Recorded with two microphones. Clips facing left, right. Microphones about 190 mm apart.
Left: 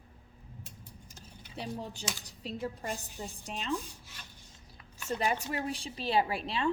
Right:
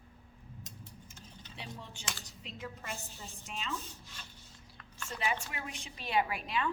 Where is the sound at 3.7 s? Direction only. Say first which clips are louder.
Left 7 dB; 15° left (ahead or behind).